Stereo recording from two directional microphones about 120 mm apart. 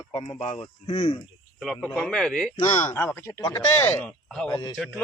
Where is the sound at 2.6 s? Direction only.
40° left (ahead or behind).